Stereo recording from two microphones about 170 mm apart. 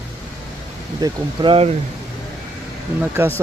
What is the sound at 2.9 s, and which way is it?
Speech, 15° right (ahead or behind).